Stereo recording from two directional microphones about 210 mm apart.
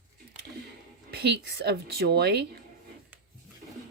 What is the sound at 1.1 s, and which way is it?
Speech, 50° right (ahead or behind).